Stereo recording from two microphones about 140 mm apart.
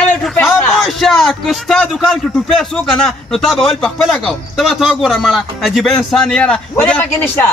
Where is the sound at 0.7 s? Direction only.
Centre (ahead or behind).